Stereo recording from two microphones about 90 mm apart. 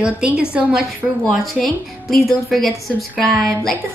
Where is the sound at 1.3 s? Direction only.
Centre (ahead or behind).